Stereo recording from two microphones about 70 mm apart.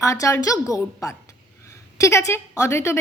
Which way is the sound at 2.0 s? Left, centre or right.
Left.